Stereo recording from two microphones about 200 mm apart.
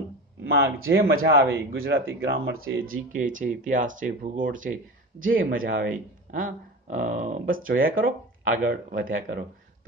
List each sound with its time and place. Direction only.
0.4 s speech: 75° right (ahead or behind)
2.2 s speech: 50° right (ahead or behind)
2.6 s speech: 90° right
3.2 s speech: 40° right (ahead or behind)